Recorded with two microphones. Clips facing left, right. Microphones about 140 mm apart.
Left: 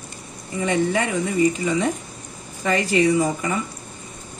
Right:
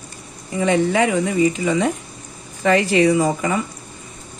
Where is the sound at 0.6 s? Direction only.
90° right.